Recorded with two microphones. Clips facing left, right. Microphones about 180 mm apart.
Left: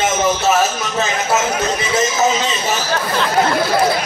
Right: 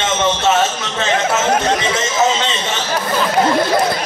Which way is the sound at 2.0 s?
25° right (ahead or behind).